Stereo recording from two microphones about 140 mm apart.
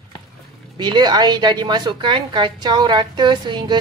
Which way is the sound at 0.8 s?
30° right (ahead or behind).